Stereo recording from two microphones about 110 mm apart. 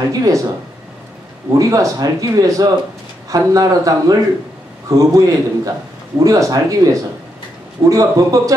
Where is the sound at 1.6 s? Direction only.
30° right (ahead or behind).